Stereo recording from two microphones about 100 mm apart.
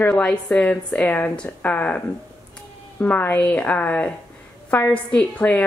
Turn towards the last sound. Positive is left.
turn(degrees=15)  # may be behind; listen again after turning